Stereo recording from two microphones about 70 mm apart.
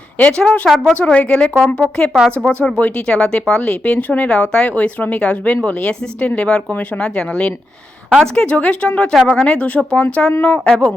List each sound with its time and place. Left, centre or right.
0.2 s speech: centre